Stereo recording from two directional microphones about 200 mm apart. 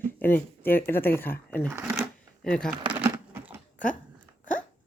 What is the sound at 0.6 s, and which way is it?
Speech, 10° left (ahead or behind).